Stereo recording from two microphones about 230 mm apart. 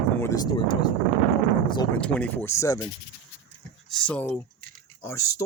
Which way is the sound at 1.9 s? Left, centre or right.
Centre.